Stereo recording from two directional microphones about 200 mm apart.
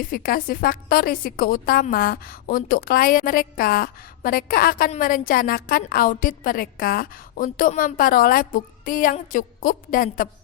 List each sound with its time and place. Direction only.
0.0 s a woman's voice: 45° left (ahead or behind)